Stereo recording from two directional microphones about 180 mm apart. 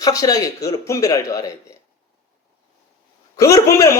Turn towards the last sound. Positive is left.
turn(degrees=15)  # may be behind; listen again after turning